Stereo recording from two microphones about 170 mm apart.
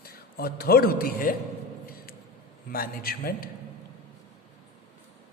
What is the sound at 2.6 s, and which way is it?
Speech, 60° left (ahead or behind).